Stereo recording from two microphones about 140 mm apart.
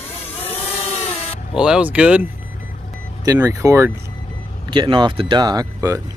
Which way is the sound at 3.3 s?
20° right (ahead or behind).